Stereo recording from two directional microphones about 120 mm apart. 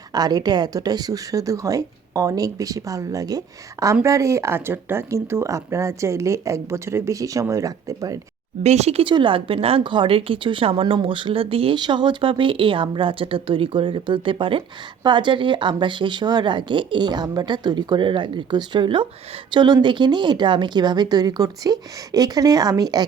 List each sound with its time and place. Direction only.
0.1 s speech: 35° right (ahead or behind)
8.6 s speech: 65° right (ahead or behind)
9.0 s a woman's voice: 45° right (ahead or behind)